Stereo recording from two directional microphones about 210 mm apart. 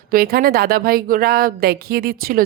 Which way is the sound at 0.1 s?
45° right (ahead or behind).